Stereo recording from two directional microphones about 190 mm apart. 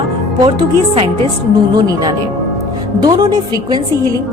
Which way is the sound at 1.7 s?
20° right (ahead or behind).